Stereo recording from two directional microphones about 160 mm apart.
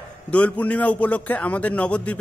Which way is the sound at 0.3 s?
10° left (ahead or behind).